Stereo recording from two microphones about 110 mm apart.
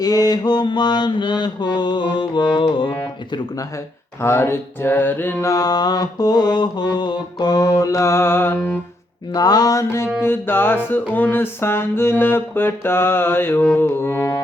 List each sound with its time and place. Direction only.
0.0 s mantra: 35° left (ahead or behind)
4.2 s music: 20° left (ahead or behind)
5.5 s mantra: 35° left (ahead or behind)
9.3 s mantra: 35° left (ahead or behind)
10.2 s music: 20° left (ahead or behind)